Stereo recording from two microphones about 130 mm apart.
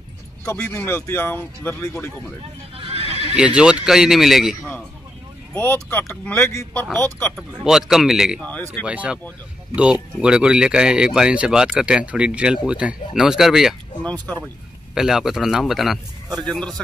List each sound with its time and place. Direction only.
0.6 s speech: 15° left (ahead or behind)
2.9 s neigh: 50° right (ahead or behind)
3.3 s a man's voice: 5° right (ahead or behind)
5.5 s speech: 15° left (ahead or behind)
7.6 s a man's voice: 5° right (ahead or behind)
8.4 s speech: 10° left (ahead or behind)
8.8 s a man's voice: 10° right (ahead or behind)
15.0 s a man's voice: 5° right (ahead or behind)